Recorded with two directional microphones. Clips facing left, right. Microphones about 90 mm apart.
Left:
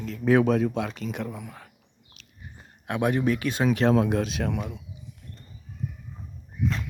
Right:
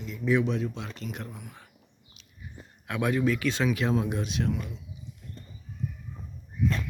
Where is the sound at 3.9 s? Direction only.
80° left.